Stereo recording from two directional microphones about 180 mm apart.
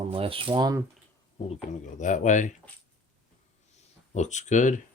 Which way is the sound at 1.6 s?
45° left (ahead or behind).